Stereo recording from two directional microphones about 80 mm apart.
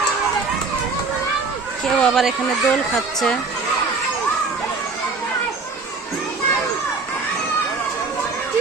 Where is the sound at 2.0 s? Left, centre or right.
Centre.